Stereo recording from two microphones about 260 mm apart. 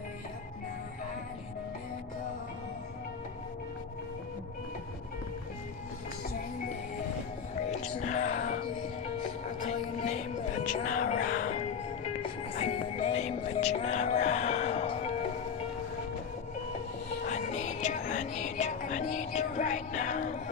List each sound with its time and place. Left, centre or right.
7.8 s music: left
9.6 s music: left
17.3 s music: left